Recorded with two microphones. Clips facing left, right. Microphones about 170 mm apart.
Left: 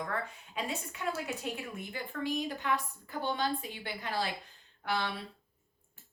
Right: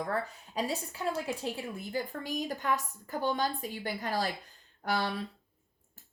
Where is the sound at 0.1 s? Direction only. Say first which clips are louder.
Right 4 dB; 35° right (ahead or behind).